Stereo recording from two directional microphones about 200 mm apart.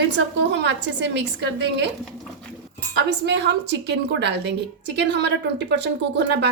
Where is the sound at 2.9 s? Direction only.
60° right (ahead or behind).